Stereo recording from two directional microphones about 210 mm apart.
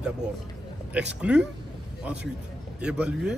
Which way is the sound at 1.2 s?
5° right (ahead or behind).